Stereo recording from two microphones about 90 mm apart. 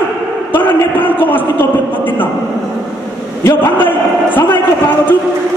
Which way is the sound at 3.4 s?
25° left (ahead or behind).